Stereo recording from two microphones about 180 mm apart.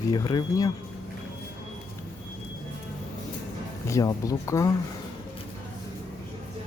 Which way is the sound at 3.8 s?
20° left (ahead or behind).